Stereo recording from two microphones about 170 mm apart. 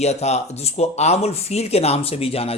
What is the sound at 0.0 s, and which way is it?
A man's voice, 40° left (ahead or behind).